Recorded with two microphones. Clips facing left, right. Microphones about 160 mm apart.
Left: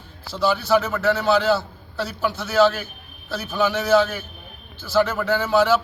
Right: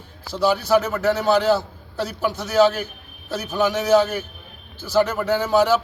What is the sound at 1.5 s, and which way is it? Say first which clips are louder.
A man's voice: right 2 dB; 15° right (ahead or behind).